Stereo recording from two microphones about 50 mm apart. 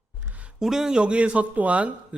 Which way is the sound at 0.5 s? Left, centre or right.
Centre.